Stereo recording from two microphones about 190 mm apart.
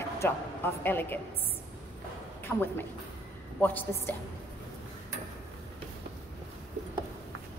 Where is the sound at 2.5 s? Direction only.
5° left (ahead or behind).